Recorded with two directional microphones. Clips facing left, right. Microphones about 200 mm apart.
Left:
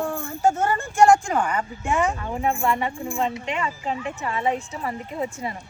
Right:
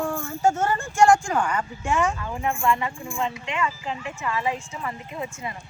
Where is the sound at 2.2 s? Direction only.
20° left (ahead or behind).